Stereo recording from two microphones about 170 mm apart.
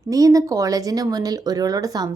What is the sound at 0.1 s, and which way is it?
A woman's voice, 20° right (ahead or behind).